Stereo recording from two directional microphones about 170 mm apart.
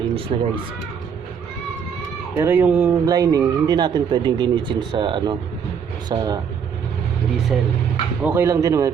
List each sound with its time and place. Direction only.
0.3 s speech: 40° right (ahead or behind)
2.3 s speech: 10° right (ahead or behind)
3.1 s speech: 20° right (ahead or behind)
8.2 s speech: 10° right (ahead or behind)